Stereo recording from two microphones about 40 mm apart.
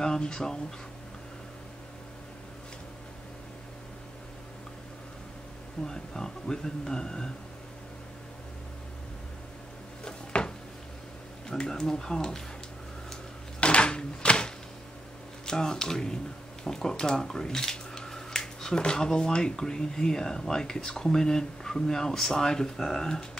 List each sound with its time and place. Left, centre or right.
0.0 s speech: centre
5.9 s speech: centre
10.0 s a sound: centre
11.4 s speech: centre
13.6 s a sound: left
15.4 s speech: centre